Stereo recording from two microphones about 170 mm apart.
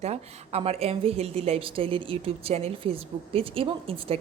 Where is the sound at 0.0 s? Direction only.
40° right (ahead or behind).